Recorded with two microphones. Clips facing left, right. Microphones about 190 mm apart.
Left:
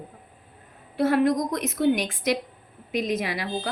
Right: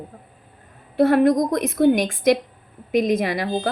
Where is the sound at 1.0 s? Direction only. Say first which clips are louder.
Right 5 dB; 50° right (ahead or behind).